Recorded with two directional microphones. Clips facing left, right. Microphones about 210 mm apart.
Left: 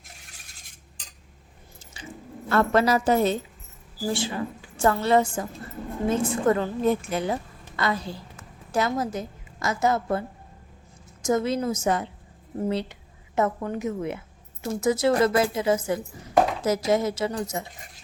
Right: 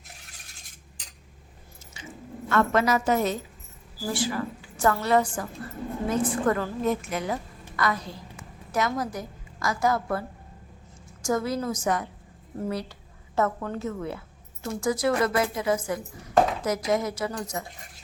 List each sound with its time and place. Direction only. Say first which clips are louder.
2.5 s a woman's voice: left 2 dB; 35° left (ahead or behind)